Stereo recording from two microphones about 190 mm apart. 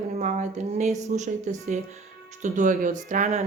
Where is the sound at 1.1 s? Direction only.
40° right (ahead or behind).